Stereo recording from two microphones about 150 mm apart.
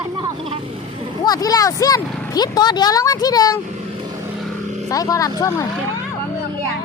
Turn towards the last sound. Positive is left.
turn(degrees=25)  # may be behind; listen again after turning